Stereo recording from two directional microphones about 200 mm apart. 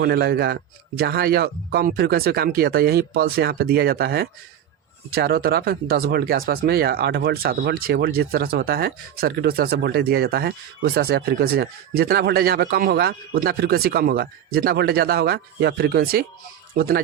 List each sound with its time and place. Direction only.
0.0 s speech: 55° right (ahead or behind)